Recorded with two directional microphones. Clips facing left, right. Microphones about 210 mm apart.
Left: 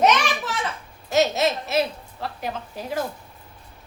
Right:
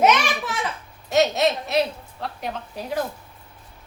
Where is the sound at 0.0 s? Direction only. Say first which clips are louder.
Right 1 dB; 10° right (ahead or behind).